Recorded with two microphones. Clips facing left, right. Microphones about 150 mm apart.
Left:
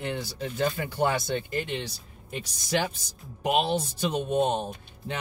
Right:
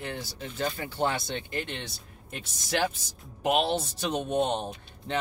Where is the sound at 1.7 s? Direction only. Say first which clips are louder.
Left 5 dB; centre (ahead or behind).